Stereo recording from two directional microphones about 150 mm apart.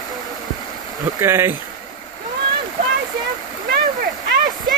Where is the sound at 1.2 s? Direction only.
15° right (ahead or behind).